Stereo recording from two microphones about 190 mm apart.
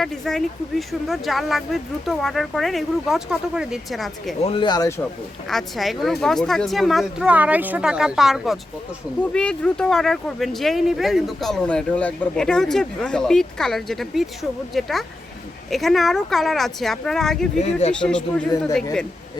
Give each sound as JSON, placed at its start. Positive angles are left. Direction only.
{"t": 0.0, "sound": "speech", "side_deg": 0}
{"t": 4.4, "sound": "speech", "side_deg": 25}
{"t": 5.5, "sound": "speech", "side_deg": 0}
{"t": 17.6, "sound": "speech", "side_deg": 35}
{"t": 17.9, "sound": "speech", "side_deg": 5}